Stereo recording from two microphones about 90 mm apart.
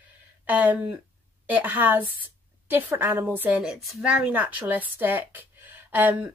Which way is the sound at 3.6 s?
5° right (ahead or behind).